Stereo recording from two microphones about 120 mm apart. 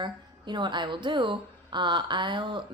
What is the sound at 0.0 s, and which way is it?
A woman's voice, 40° right (ahead or behind).